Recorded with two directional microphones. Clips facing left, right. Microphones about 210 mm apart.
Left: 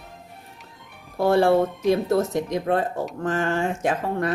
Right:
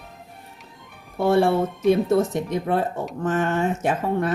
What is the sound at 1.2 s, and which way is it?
A woman's voice, centre (ahead or behind).